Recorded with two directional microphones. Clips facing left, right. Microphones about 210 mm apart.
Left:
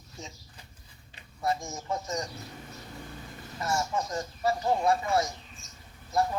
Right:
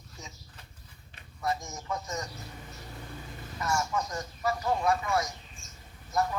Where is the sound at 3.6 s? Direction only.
25° left (ahead or behind).